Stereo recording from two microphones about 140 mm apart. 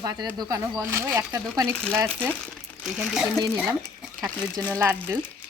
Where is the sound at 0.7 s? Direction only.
15° right (ahead or behind).